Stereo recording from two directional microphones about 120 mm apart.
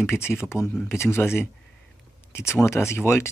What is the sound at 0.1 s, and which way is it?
Speech, 20° left (ahead or behind).